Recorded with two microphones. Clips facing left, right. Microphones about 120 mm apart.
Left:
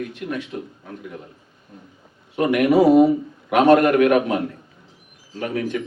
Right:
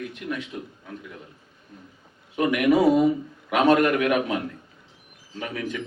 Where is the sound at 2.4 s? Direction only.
30° left (ahead or behind).